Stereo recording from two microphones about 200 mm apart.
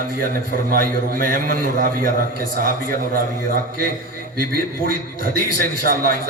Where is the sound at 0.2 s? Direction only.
45° right (ahead or behind).